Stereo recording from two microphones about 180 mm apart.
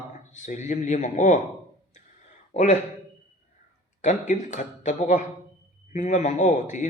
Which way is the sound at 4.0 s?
40° left (ahead or behind).